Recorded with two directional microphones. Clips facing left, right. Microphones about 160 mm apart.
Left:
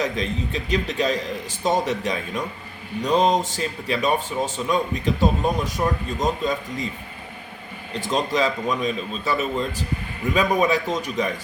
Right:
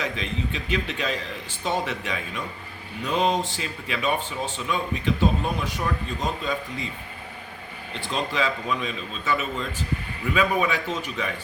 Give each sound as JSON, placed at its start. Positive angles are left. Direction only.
{"t": 0.0, "sound": "speech", "side_deg": 40}
{"t": 7.9, "sound": "speech", "side_deg": 40}